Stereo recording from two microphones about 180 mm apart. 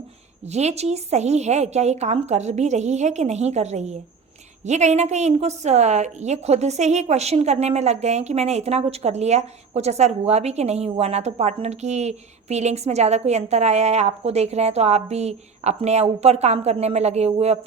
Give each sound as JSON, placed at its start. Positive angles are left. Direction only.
{"t": 0.4, "sound": "a woman's voice", "side_deg": -40}